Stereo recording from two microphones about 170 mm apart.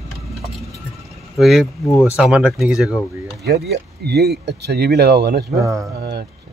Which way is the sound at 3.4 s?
75° right (ahead or behind).